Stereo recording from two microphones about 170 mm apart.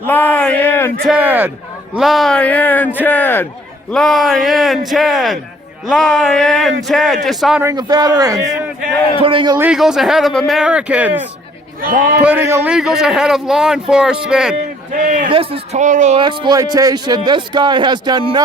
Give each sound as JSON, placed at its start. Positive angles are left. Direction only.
{"t": 0.1, "sound": "speech", "side_deg": 10}
{"t": 1.0, "sound": "a man's voice", "side_deg": -10}
{"t": 3.9, "sound": "speech", "side_deg": 0}
{"t": 7.6, "sound": "a man's voice", "side_deg": -20}
{"t": 9.6, "sound": "speech", "side_deg": -5}
{"t": 11.8, "sound": "a man's voice", "side_deg": -55}
{"t": 12.2, "sound": "a man's voice", "side_deg": -10}
{"t": 12.7, "sound": "speech", "side_deg": -5}
{"t": 14.9, "sound": "a man's voice", "side_deg": -50}
{"t": 15.3, "sound": "speech", "side_deg": -35}
{"t": 16.4, "sound": "a man's voice", "side_deg": -20}